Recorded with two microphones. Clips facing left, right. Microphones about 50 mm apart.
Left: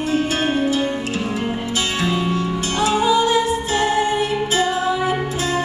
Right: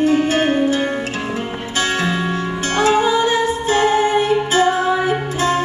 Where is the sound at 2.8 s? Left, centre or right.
Right.